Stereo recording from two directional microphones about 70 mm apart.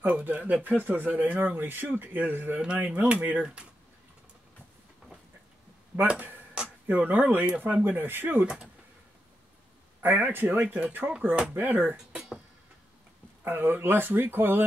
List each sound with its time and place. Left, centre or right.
0.0 s speech: right
2.6 s speech: centre
6.0 s a sound: centre
6.9 s speech: right
10.0 s speech: right
11.5 s speech: right
12.1 s music: centre
13.4 s speech: right